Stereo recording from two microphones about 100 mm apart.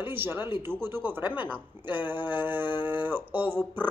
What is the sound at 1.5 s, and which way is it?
Speech, 20° right (ahead or behind).